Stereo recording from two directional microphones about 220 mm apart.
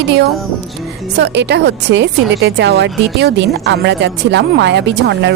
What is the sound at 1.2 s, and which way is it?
Speech, 50° right (ahead or behind).